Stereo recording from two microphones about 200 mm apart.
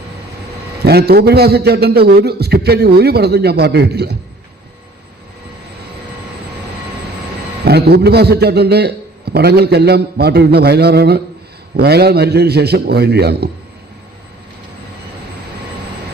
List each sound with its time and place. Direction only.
0.9 s a man's voice: 50° right (ahead or behind)
7.6 s a man's voice: 55° right (ahead or behind)